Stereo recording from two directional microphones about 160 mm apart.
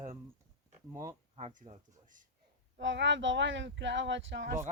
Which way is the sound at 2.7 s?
90° right.